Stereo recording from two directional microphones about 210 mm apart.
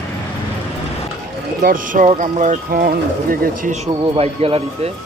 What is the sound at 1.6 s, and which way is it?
Speech, 40° right (ahead or behind).